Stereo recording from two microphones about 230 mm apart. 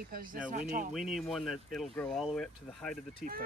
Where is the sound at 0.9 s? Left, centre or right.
Centre.